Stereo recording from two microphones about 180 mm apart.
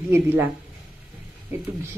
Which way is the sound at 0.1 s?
15° right (ahead or behind).